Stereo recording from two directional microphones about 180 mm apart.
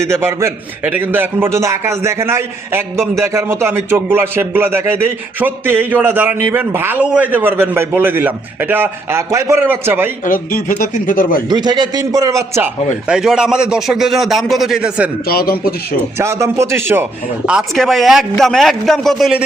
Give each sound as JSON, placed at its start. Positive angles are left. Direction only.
{"t": 0.0, "sound": "a man's voice", "side_deg": -15}
{"t": 10.2, "sound": "a man's voice", "side_deg": 50}
{"t": 11.4, "sound": "a man's voice", "side_deg": -25}
{"t": 13.1, "sound": "a man's voice", "side_deg": -5}
{"t": 15.3, "sound": "a man's voice", "side_deg": 55}
{"t": 16.1, "sound": "a man's voice", "side_deg": -15}